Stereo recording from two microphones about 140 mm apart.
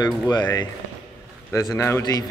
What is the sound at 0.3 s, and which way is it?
A man's voice, 30° left (ahead or behind).